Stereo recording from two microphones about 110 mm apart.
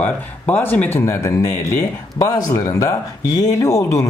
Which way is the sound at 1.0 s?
25° left (ahead or behind).